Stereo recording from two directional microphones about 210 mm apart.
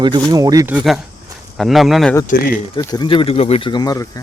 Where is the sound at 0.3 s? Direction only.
15° right (ahead or behind).